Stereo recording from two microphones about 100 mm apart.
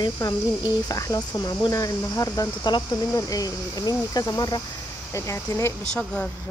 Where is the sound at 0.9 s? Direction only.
35° left (ahead or behind).